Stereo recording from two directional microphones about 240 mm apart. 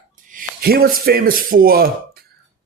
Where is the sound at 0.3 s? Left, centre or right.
Right.